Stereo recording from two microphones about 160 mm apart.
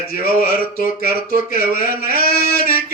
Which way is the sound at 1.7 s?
60° left (ahead or behind).